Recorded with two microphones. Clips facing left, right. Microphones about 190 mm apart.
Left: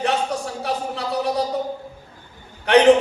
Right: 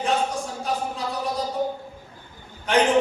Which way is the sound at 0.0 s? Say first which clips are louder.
Left 2 dB; 70° left (ahead or behind).